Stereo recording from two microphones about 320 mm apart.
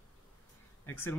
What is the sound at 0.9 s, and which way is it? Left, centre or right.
Speech, centre.